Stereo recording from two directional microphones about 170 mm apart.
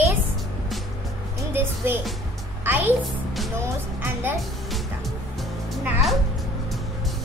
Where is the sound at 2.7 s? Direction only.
10° right (ahead or behind).